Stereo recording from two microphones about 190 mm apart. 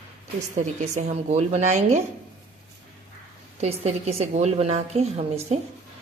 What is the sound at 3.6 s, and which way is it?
A woman's voice, 35° right (ahead or behind).